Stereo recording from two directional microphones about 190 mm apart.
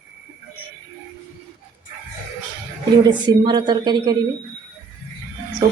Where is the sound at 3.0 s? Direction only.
20° right (ahead or behind).